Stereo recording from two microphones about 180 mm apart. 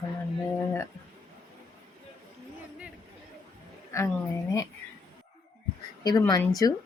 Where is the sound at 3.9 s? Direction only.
15° left (ahead or behind).